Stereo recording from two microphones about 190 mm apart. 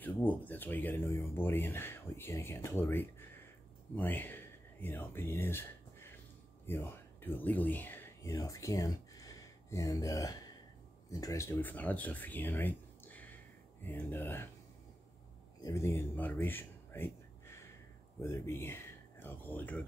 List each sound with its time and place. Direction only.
0.0 s speech: 10° left (ahead or behind)
15.6 s speech: 15° left (ahead or behind)